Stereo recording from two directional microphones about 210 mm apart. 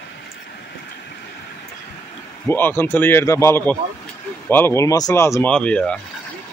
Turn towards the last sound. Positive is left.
turn(degrees=5)  # may be behind; listen again after turning